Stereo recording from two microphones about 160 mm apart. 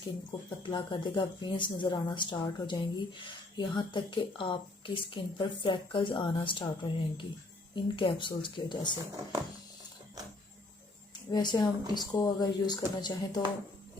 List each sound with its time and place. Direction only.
0.3 s speech: 30° left (ahead or behind)
11.3 s speech: 25° left (ahead or behind)